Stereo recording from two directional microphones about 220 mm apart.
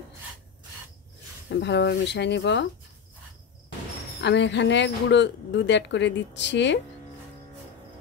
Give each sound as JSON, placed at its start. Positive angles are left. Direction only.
{"t": 1.5, "sound": "speech", "side_deg": 50}
{"t": 4.2, "sound": "speech", "side_deg": 55}